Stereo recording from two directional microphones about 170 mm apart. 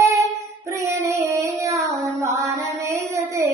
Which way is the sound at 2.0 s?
20° right (ahead or behind).